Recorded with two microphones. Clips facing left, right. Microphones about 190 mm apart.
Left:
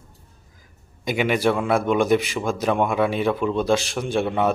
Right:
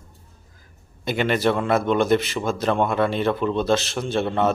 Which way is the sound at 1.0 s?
10° left (ahead or behind).